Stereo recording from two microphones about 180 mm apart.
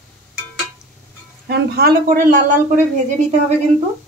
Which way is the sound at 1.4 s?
65° right (ahead or behind).